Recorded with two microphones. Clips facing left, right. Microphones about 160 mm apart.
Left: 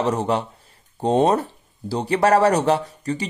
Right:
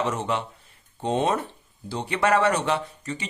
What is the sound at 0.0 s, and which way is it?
Speech, 35° left (ahead or behind).